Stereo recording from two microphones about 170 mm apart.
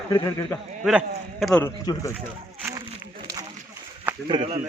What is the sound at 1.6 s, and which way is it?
Speech, 20° left (ahead or behind).